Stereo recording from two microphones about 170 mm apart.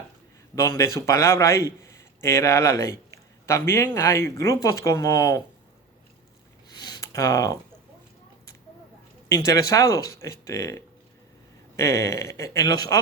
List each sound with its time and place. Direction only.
0.5 s a man's voice: 15° left (ahead or behind)
6.7 s a sound: 25° left (ahead or behind)
9.3 s a man's voice: 20° left (ahead or behind)